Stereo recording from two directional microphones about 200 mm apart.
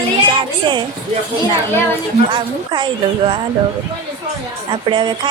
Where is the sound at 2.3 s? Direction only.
25° right (ahead or behind).